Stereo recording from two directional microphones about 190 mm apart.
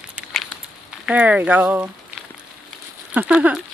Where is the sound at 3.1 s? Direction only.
5° right (ahead or behind).